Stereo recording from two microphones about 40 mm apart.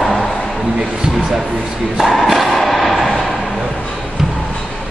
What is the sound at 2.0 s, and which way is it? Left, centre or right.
Thump, centre.